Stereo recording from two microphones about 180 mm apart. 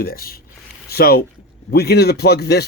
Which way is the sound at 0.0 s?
55° left (ahead or behind).